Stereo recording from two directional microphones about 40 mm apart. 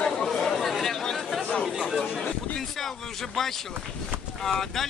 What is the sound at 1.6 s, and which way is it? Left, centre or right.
Speech, centre.